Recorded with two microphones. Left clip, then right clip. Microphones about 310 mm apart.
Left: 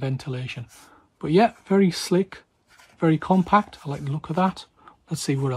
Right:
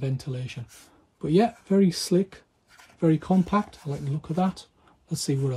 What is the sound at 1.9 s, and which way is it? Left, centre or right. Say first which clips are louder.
Speech: left 2 dB; left.